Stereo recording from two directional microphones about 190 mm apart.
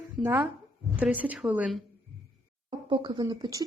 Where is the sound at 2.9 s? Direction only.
25° right (ahead or behind).